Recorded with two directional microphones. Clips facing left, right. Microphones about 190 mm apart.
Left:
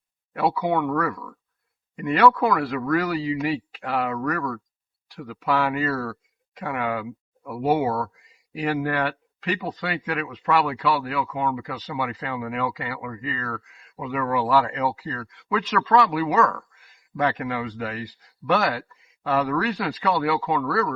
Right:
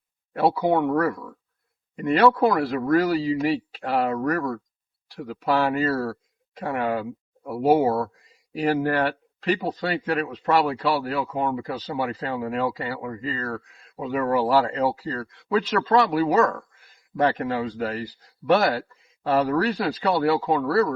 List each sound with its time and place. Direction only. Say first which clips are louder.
0.3 s a man's voice: right 2 dB; 35° right (ahead or behind)